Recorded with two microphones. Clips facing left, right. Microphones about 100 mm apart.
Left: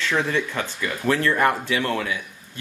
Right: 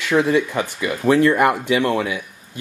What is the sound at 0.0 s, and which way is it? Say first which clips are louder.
Speech: right 6 dB; 15° right (ahead or behind).